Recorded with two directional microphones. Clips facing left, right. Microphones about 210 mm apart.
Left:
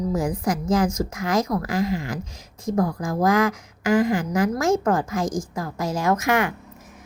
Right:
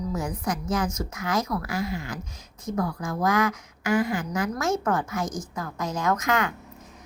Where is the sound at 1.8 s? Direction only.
90° left.